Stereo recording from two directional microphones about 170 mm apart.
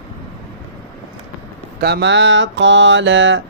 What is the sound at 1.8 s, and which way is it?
Mantra, 80° right.